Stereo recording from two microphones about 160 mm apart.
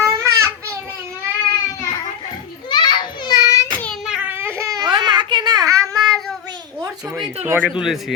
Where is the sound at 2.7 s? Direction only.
25° left (ahead or behind).